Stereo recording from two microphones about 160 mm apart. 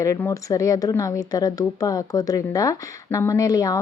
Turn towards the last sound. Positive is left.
turn(degrees=20)  # may be behind; listen again after turning